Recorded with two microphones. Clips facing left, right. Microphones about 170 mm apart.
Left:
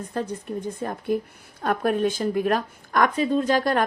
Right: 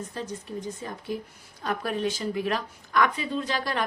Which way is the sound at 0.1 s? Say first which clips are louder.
Left 6 dB; 55° left (ahead or behind).